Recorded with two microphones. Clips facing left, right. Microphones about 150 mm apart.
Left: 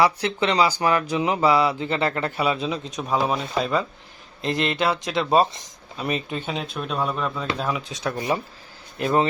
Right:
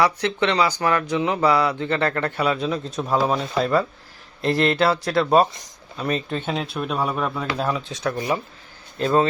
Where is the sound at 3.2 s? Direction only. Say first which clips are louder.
Right 2 dB; centre (ahead or behind).